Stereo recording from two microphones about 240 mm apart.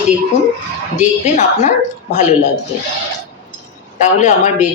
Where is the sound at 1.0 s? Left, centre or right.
Left.